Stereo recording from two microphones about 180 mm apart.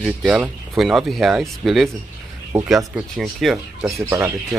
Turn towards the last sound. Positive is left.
turn(degrees=-15)  # may be behind; listen again after turning